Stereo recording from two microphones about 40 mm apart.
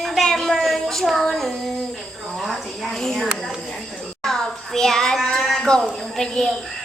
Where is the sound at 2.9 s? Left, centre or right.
Centre.